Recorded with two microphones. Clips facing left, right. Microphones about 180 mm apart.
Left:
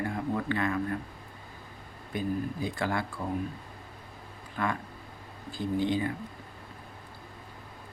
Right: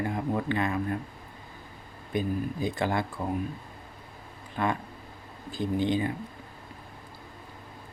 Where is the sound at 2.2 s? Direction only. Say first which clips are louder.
Right 2 dB; 20° right (ahead or behind).